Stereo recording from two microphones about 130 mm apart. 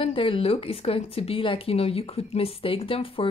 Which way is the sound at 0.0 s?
45° left (ahead or behind).